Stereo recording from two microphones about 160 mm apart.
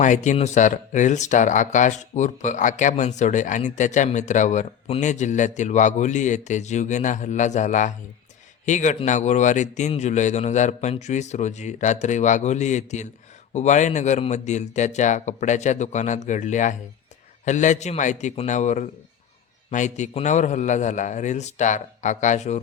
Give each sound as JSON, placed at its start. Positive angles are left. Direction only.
{"t": 0.0, "sound": "speech", "side_deg": 50}